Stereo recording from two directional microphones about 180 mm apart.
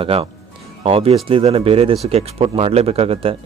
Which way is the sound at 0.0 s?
30° right (ahead or behind).